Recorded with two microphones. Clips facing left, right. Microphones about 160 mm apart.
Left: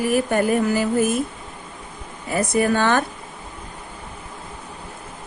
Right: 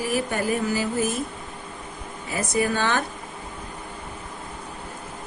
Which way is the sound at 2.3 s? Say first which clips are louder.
Left 5 dB; 50° left (ahead or behind).